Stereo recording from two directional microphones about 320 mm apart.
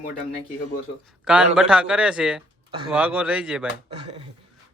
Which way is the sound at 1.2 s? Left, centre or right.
Centre.